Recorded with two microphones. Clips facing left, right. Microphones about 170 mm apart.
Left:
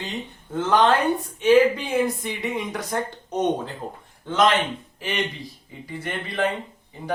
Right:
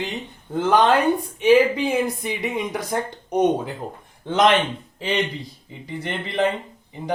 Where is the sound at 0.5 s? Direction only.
15° right (ahead or behind).